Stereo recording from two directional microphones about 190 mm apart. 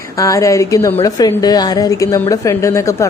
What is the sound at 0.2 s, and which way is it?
Speech, 15° left (ahead or behind).